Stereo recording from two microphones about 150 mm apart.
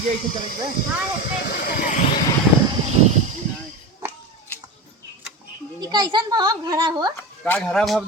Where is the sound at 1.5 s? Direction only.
75° left (ahead or behind).